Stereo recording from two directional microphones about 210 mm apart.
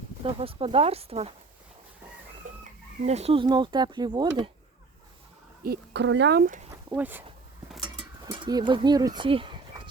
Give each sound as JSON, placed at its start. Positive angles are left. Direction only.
{"t": 0.2, "sound": "speech", "side_deg": -25}
{"t": 2.5, "sound": "chicken", "side_deg": -35}
{"t": 3.1, "sound": "speech", "side_deg": -30}
{"t": 5.6, "sound": "speech", "side_deg": -50}
{"t": 6.9, "sound": "speech", "side_deg": -10}
{"t": 8.3, "sound": "speech", "side_deg": -20}